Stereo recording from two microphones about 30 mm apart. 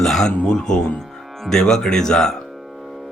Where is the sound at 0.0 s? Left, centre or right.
Centre.